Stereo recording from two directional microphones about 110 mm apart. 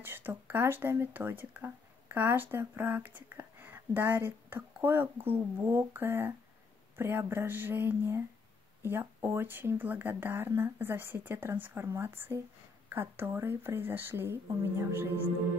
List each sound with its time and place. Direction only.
0.0 s speech: 20° right (ahead or behind)